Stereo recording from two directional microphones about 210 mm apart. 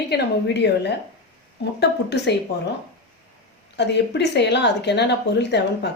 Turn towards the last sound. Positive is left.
turn(degrees=55)  # may be behind; listen again after turning